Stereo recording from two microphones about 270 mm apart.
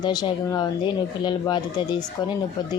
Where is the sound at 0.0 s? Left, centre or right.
Centre.